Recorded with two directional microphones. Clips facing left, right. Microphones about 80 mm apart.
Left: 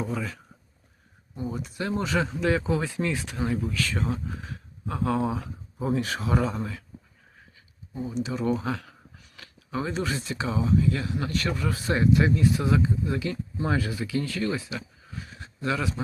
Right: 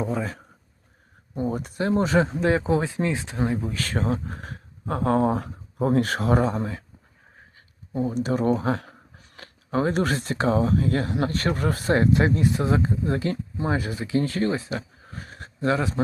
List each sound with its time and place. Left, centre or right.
0.0 s speech: right
3.8 s speech: right
6.5 s speech: right
7.9 s speech: right
8.4 s speech: right
13.6 s speech: right
15.6 s speech: right